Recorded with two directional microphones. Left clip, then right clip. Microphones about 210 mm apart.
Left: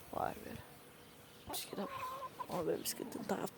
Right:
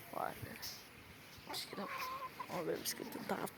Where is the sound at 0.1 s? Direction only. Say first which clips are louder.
Left 3 dB; 25° left (ahead or behind).